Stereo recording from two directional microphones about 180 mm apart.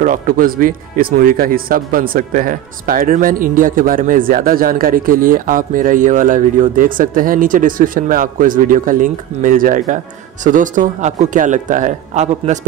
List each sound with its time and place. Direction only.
0.0 s speech: 50° right (ahead or behind)